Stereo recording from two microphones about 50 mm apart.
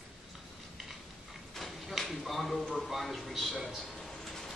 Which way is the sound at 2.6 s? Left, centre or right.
Centre.